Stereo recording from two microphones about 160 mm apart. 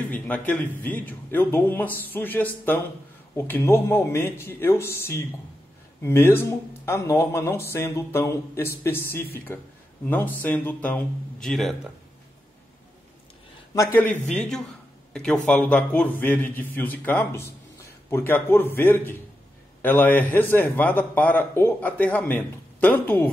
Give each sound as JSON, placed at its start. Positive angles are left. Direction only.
{"t": 0.5, "sound": "a man's voice", "side_deg": 10}
{"t": 13.7, "sound": "a man's voice", "side_deg": 15}
{"t": 14.3, "sound": "a man's voice", "side_deg": 5}